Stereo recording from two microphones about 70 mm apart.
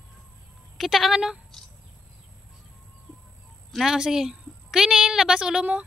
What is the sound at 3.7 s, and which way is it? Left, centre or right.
A woman's voice, centre.